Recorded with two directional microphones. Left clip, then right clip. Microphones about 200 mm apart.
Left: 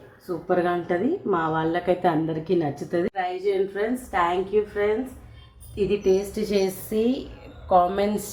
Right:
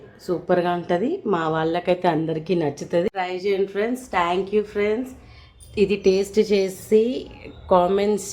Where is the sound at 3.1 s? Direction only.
45° right (ahead or behind).